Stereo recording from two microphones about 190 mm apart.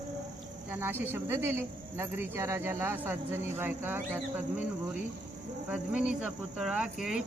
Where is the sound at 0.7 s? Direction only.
10° right (ahead or behind).